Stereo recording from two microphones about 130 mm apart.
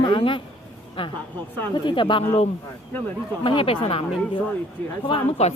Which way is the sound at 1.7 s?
35° left (ahead or behind).